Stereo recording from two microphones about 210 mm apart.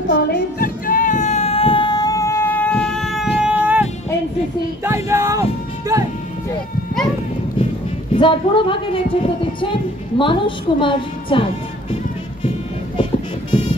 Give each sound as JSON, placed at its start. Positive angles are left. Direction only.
{"t": 0.1, "sound": "music", "side_deg": 45}
{"t": 3.3, "sound": "a sound", "side_deg": -5}
{"t": 4.8, "sound": "music", "side_deg": -15}
{"t": 8.1, "sound": "a woman's voice", "side_deg": 25}